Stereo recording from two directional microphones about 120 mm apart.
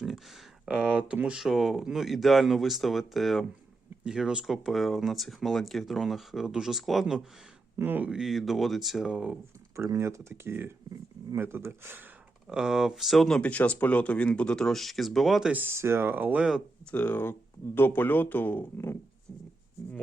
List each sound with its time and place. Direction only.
0.6 s speech: 10° right (ahead or behind)
7.8 s speech: 15° right (ahead or behind)
9.7 s speech: 25° right (ahead or behind)
12.5 s speech: 5° right (ahead or behind)
15.5 s speech: 20° right (ahead or behind)
16.9 s speech: 15° left (ahead or behind)